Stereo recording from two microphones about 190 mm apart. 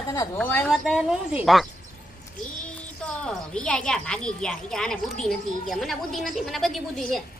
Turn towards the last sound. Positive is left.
turn(degrees=0)  # may be behind; listen again after turning